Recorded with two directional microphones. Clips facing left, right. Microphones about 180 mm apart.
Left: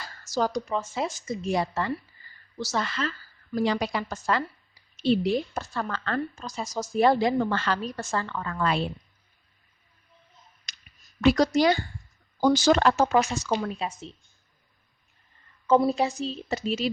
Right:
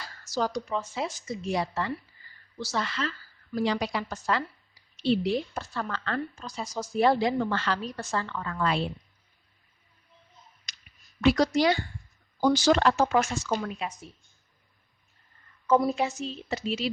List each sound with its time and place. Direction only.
0.0 s a woman's voice: 45° left (ahead or behind)
10.7 s a sound: 50° left (ahead or behind)
11.2 s a woman's voice: 45° left (ahead or behind); by 14.2 s 25° left (ahead or behind)
15.6 s speech: 30° left (ahead or behind); by 16.9 s 45° left (ahead or behind)